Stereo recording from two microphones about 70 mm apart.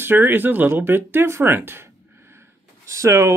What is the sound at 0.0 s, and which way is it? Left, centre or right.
Speech, right.